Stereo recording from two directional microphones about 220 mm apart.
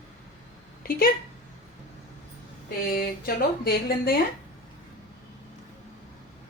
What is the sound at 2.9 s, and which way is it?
A woman's voice, 45° left (ahead or behind).